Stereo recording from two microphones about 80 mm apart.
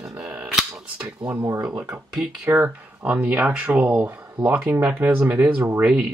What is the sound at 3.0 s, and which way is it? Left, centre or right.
Speech, centre.